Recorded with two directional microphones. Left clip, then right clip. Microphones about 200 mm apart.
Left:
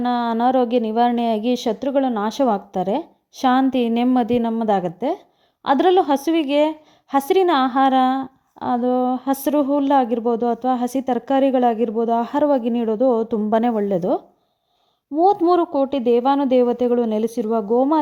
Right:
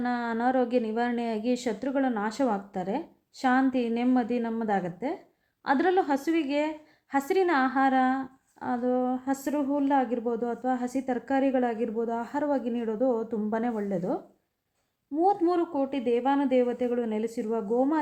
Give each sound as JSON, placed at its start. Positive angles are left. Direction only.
{"t": 0.0, "sound": "a woman's voice", "side_deg": 40}
{"t": 15.2, "sound": "a woman's voice", "side_deg": 40}